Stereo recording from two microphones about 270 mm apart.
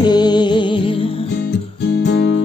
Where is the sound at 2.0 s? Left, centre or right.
Left.